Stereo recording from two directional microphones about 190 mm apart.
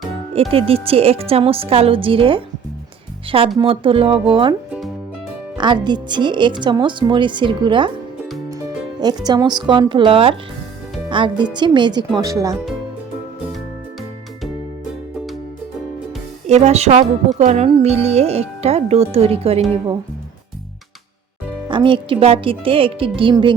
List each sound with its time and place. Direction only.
0.3 s speech: 30° right (ahead or behind)
5.5 s speech: 25° right (ahead or behind)
9.0 s speech: 20° right (ahead or behind)
16.5 s speech: 35° right (ahead or behind)
21.7 s speech: 25° right (ahead or behind)